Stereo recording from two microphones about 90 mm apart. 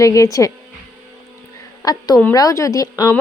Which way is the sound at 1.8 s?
45° left (ahead or behind).